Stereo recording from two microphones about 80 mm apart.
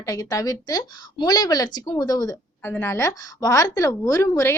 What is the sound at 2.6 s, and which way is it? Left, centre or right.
A woman's voice, left.